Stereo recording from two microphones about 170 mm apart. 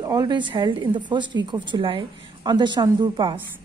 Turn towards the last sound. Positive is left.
turn(degrees=-30)  # may be behind; listen again after turning